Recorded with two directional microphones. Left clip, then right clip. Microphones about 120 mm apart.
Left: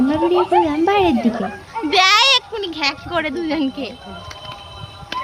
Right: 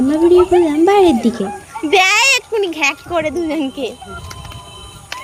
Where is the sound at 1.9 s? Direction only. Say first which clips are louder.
Right 1 dB; 10° right (ahead or behind).